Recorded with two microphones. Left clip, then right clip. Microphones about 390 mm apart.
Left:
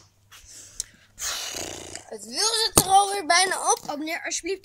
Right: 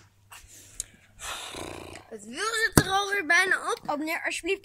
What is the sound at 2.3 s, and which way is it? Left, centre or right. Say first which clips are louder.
Speech: left 2 dB; centre.